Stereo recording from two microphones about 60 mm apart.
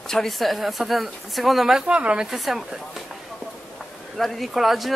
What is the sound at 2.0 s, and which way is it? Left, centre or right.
Speech, centre.